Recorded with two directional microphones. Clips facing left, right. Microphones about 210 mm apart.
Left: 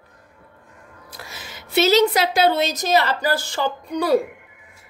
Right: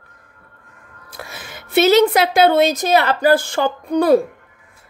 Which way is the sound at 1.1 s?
55° right (ahead or behind).